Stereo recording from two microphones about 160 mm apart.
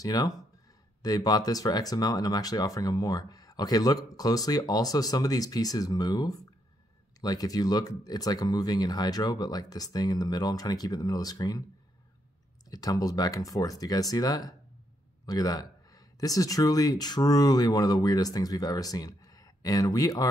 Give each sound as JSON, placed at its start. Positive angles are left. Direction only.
{"t": 0.0, "sound": "speech", "side_deg": 25}
{"t": 12.6, "sound": "speech", "side_deg": 20}